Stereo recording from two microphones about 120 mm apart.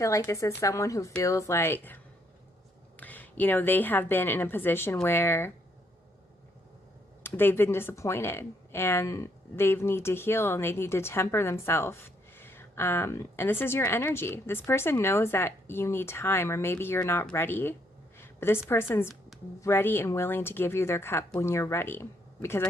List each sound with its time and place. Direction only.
0.0 s speech: 25° left (ahead or behind)
3.0 s a woman's voice: 15° left (ahead or behind)
7.2 s a woman's voice: 20° left (ahead or behind)